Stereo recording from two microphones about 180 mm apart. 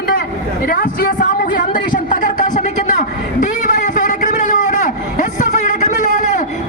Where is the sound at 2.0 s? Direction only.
45° left (ahead or behind).